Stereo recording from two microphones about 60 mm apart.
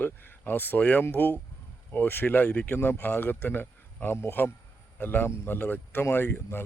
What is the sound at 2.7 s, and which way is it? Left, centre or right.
Speech, left.